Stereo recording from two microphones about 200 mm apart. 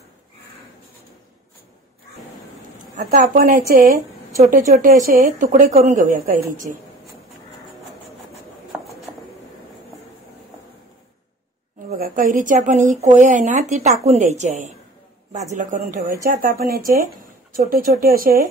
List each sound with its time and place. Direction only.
3.0 s a woman's voice: 35° right (ahead or behind)
12.0 s a woman's voice: 40° right (ahead or behind)